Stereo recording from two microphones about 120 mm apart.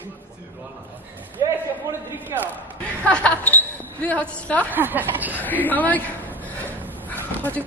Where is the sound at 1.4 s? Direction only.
20° right (ahead or behind).